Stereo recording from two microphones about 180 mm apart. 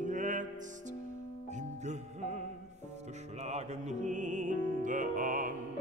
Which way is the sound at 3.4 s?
40° right (ahead or behind).